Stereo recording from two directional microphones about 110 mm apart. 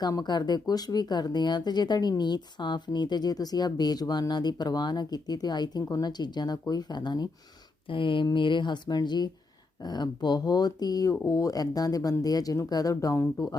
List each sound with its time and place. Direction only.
0.0 s speech: 40° left (ahead or behind)